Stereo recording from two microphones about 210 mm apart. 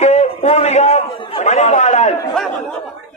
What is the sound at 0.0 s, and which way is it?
A man's voice, 30° left (ahead or behind).